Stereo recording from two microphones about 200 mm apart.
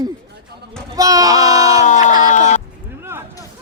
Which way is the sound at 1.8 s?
35° left (ahead or behind).